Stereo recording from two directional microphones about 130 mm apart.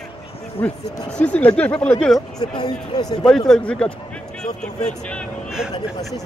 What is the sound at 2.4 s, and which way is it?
Speech, 30° left (ahead or behind).